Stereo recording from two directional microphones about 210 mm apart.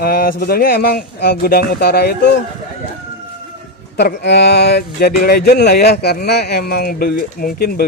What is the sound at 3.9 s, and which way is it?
Speech, 50° left (ahead or behind).